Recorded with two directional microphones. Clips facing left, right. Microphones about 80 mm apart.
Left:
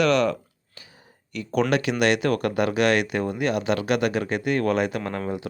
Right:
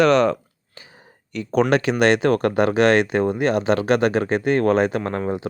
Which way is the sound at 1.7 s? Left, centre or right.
Right.